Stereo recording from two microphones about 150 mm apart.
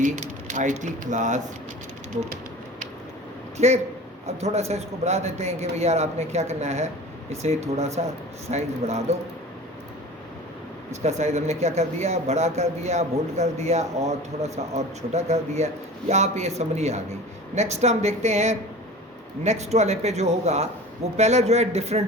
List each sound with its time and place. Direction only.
0.0 s speech: 60° right (ahead or behind)
3.6 s a man's voice: 45° right (ahead or behind)
11.2 s a man's voice: 45° right (ahead or behind)